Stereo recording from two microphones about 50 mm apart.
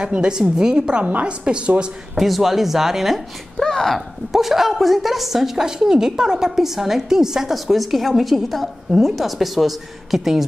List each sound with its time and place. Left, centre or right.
0.0 s a woman's voice: centre
2.1 s a woman's voice: centre
3.5 s a woman's voice: centre